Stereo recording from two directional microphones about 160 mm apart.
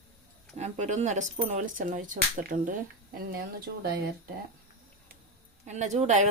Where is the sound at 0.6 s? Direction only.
45° right (ahead or behind); by 4.3 s 75° right (ahead or behind).